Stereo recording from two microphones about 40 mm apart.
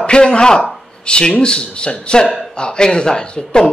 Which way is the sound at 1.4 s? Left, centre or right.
Left.